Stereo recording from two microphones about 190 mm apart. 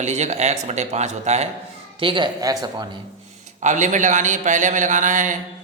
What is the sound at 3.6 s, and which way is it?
A man's voice, 40° right (ahead or behind).